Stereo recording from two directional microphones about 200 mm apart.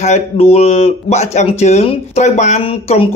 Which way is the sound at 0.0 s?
30° left (ahead or behind).